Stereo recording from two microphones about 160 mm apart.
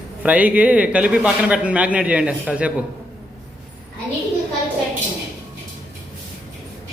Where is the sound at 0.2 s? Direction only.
10° right (ahead or behind).